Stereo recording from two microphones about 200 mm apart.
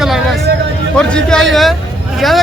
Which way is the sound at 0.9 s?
5° left (ahead or behind).